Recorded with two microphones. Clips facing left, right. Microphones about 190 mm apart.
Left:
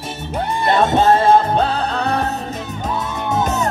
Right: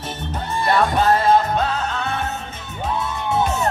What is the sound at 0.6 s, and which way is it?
Music, 20° left (ahead or behind).